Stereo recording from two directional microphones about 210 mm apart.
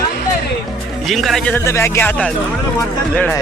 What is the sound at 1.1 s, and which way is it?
Speech, centre (ahead or behind).